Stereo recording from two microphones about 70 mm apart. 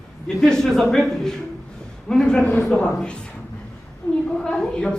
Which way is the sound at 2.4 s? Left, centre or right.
Left.